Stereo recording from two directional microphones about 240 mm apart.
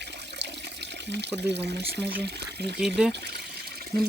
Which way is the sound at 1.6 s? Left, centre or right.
Right.